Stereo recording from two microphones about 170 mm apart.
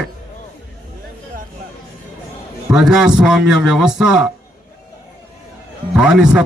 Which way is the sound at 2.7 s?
5° right (ahead or behind).